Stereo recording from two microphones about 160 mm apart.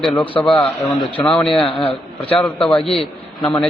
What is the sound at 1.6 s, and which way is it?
Speech, 35° left (ahead or behind).